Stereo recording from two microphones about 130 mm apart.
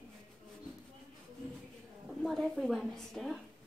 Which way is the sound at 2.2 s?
Centre (ahead or behind).